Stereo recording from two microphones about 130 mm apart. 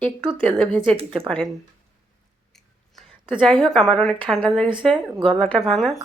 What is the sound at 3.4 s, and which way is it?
Speech, 5° left (ahead or behind).